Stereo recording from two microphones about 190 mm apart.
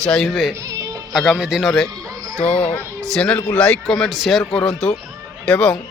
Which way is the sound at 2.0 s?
15° right (ahead or behind).